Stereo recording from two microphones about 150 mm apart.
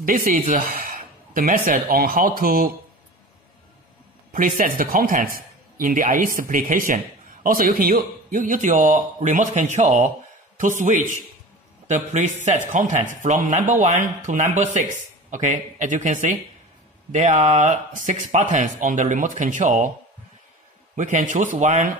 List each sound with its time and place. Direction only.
0.0 s speech: 70° right (ahead or behind)
4.3 s speech: 65° right (ahead or behind)
12.7 s speech: 55° right (ahead or behind)
20.9 s speech: 55° right (ahead or behind)